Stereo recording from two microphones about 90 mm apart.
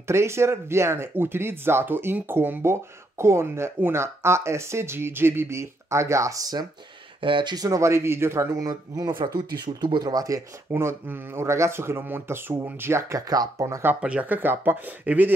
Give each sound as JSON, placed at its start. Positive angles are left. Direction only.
{"t": 0.0, "sound": "speech", "side_deg": -30}
{"t": 7.2, "sound": "speech", "side_deg": -70}
{"t": 7.5, "sound": "speech", "side_deg": -40}
{"t": 9.2, "sound": "speech", "side_deg": -55}
{"t": 10.7, "sound": "speech", "side_deg": -25}
{"t": 13.3, "sound": "speech", "side_deg": -40}
{"t": 13.8, "sound": "speech", "side_deg": -15}